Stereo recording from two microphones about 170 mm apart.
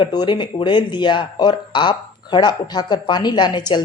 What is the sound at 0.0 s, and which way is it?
Speech, 25° left (ahead or behind).